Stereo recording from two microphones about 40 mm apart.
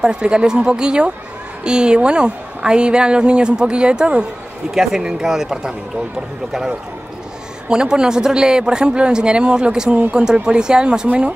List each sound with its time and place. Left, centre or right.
0.0 s a man's voice: right
7.6 s a man's voice: right